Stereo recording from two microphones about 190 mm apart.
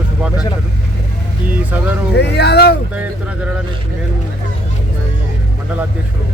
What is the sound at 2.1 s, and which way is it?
Speech, 60° left (ahead or behind).